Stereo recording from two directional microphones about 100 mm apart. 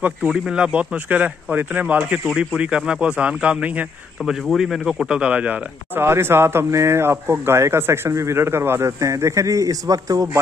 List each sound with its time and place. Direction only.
0.3 s speech: 10° right (ahead or behind)
4.2 s speech: centre (ahead or behind); by 10.4 s 35° right (ahead or behind)